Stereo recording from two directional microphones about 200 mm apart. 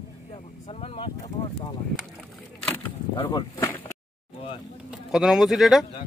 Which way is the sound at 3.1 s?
25° left (ahead or behind).